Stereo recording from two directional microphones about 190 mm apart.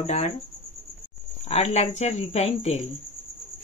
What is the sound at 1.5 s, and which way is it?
Speech, 35° left (ahead or behind).